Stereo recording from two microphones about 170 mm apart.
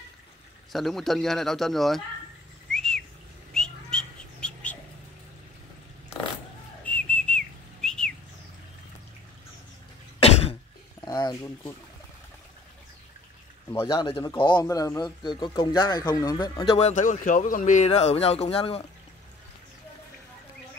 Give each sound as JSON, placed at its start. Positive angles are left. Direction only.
{"t": 0.7, "sound": "speech", "side_deg": 0}
{"t": 2.7, "sound": "whistling", "side_deg": 5}
{"t": 3.5, "sound": "bird", "side_deg": 5}
{"t": 6.8, "sound": "whistle", "side_deg": 10}
{"t": 11.1, "sound": "a sound", "side_deg": 25}
{"t": 13.7, "sound": "speech", "side_deg": 20}
{"t": 14.0, "sound": "speech", "side_deg": 30}
{"t": 16.9, "sound": "speech", "side_deg": 50}